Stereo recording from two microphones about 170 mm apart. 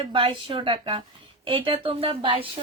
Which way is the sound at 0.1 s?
30° right (ahead or behind).